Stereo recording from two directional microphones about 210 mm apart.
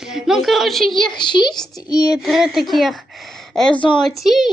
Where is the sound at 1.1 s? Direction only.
20° left (ahead or behind).